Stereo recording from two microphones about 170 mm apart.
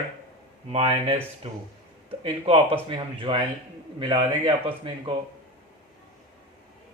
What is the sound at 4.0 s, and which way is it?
Speech, 30° right (ahead or behind).